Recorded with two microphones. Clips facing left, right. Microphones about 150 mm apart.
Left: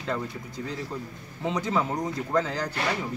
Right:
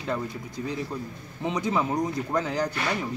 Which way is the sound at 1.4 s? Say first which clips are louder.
Right 1 dB; 15° right (ahead or behind).